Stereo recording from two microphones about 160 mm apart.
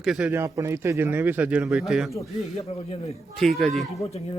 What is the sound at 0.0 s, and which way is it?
Speech, 5° right (ahead or behind).